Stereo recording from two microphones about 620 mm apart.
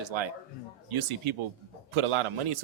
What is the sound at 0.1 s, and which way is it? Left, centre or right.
Speech, right.